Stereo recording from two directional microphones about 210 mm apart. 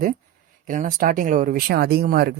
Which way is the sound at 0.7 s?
40° right (ahead or behind).